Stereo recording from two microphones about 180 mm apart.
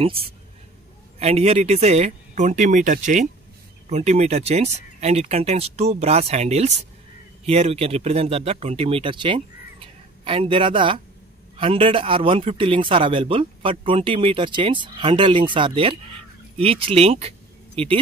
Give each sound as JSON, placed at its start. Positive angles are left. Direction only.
{"t": 0.0, "sound": "speech", "side_deg": -30}